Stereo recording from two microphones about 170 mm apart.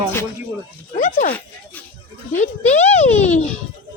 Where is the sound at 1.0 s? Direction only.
50° left (ahead or behind).